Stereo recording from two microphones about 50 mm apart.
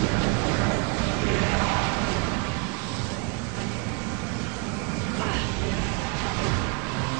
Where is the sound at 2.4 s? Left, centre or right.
Right.